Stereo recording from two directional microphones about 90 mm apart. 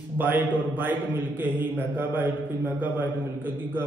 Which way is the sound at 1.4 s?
20° right (ahead or behind).